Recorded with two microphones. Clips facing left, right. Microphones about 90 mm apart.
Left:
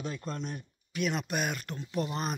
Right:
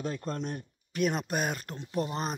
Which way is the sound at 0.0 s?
40° right (ahead or behind).